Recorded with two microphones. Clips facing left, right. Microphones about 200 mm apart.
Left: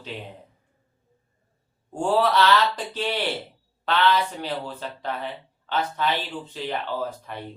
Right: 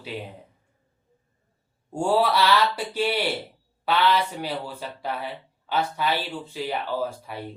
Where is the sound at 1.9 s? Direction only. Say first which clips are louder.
Even; 10° right (ahead or behind).